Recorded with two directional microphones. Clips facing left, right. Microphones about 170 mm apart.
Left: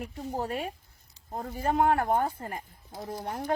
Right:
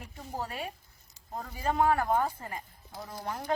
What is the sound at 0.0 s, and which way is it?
A woman's voice, 55° left (ahead or behind).